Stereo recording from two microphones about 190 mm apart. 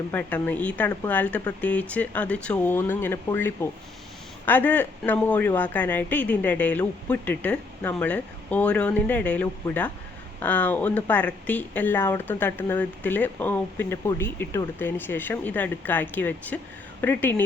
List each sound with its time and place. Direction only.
0.1 s speech: 10° left (ahead or behind)